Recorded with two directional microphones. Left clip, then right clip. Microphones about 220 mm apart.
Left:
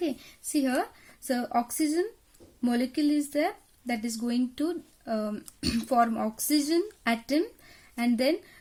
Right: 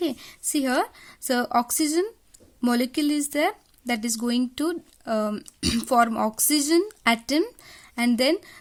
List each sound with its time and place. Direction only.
0.6 s speech: 40° right (ahead or behind)